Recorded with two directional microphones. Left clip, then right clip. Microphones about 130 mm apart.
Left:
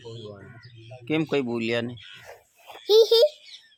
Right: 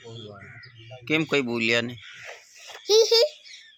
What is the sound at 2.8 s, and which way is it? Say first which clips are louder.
Speech: left 2 dB; 70° left (ahead or behind).